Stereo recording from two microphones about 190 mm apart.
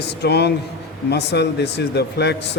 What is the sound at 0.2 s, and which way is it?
Speech, 60° left (ahead or behind).